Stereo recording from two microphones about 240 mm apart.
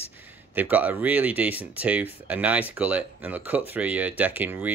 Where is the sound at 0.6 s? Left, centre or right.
Centre.